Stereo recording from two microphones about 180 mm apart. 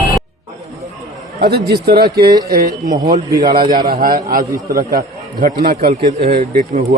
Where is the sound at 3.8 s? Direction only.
55° right (ahead or behind).